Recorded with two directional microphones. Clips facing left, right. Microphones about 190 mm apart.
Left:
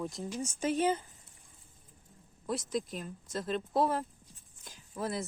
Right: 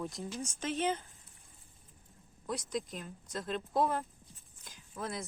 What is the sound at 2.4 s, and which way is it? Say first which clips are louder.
Speech: left 3 dB; centre (ahead or behind).